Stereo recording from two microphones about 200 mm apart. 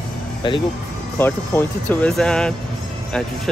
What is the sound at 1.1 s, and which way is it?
Speech, 10° left (ahead or behind).